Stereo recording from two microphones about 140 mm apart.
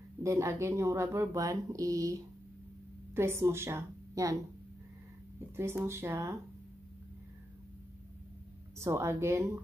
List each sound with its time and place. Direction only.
0.2 s a woman's voice: 20° right (ahead or behind)
5.6 s speech: 20° right (ahead or behind)
8.7 s speech: 20° right (ahead or behind)